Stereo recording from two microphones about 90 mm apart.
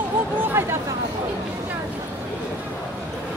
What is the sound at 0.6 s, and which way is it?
Speech, 25° right (ahead or behind).